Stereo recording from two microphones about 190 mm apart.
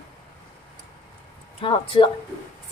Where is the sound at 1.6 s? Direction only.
25° left (ahead or behind).